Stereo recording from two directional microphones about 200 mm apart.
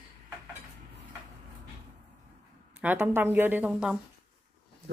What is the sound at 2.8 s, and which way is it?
A woman's voice, 10° right (ahead or behind).